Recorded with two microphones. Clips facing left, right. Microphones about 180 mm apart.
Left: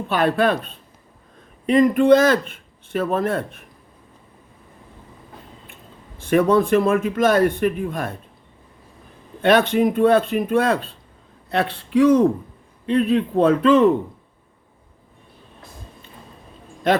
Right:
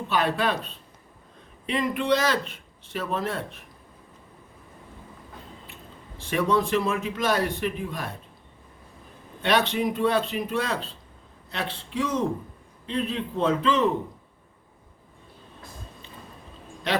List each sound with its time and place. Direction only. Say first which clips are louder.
0.1 s speech: left 6 dB; 55° left (ahead or behind)
6.1 s speech: left 8 dB; 55° left (ahead or behind)
9.4 s a man's voice: left 8 dB; 50° left (ahead or behind)
16.9 s a man's voice: left 8 dB; 50° left (ahead or behind)